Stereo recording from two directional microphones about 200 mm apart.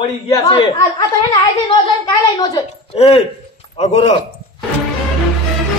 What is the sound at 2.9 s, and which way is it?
A man's voice, 30° left (ahead or behind).